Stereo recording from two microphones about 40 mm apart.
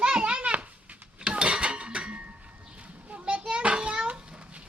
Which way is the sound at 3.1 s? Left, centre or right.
Right.